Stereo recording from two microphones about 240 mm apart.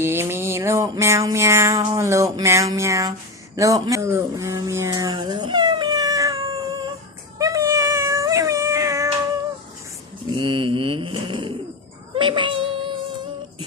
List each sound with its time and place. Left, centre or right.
0.0 s music: centre
3.5 s a sound: centre
7.3 s cat: centre
10.3 s mantra: centre
12.1 s child singing: right